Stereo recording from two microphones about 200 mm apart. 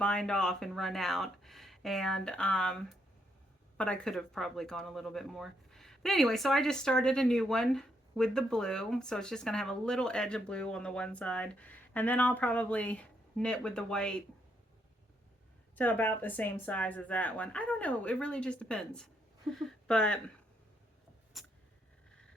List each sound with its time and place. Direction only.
0.0 s speech: 5° left (ahead or behind)
3.8 s speech: 5° left (ahead or behind)
15.7 s speech: 10° left (ahead or behind)
21.3 s vehicle: centre (ahead or behind)